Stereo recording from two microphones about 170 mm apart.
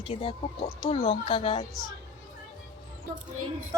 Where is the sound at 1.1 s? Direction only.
30° left (ahead or behind).